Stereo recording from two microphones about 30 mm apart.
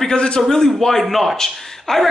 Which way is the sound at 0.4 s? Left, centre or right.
Centre.